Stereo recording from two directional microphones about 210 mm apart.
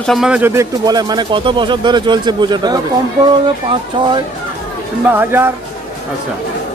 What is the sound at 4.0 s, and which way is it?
Speech, 25° right (ahead or behind).